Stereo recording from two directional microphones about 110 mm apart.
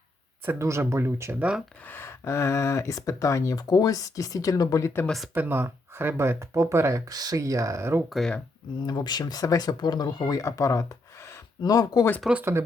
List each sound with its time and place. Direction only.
0.4 s speech: 25° right (ahead or behind)
1.9 s speech: 20° left (ahead or behind)
5.0 s speech: centre (ahead or behind)
5.3 s speech: 20° right (ahead or behind)
8.1 s speech: 5° left (ahead or behind)
8.8 s speech: 40° left (ahead or behind)
12.3 s speech: 20° right (ahead or behind)